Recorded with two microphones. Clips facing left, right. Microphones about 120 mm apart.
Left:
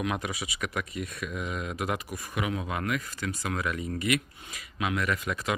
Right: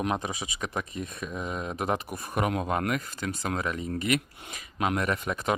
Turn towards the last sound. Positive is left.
turn(degrees=-25)  # may be behind; listen again after turning